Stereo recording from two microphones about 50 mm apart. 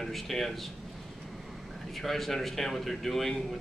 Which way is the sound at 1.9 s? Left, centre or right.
Centre.